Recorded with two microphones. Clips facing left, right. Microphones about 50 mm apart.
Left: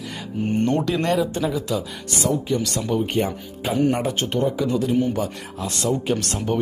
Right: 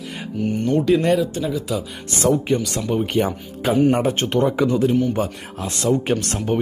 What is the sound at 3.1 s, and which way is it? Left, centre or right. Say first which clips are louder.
Speech: right 2 dB; right.